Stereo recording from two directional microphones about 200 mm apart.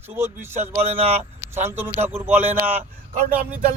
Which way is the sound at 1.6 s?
10° right (ahead or behind).